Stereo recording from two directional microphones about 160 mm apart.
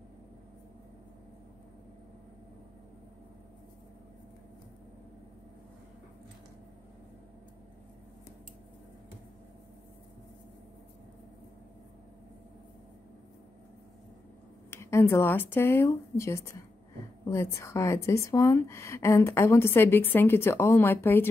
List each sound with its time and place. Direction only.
14.7 s a woman's voice: 15° left (ahead or behind)